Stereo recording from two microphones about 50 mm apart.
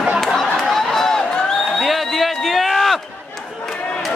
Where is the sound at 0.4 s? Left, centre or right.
Centre.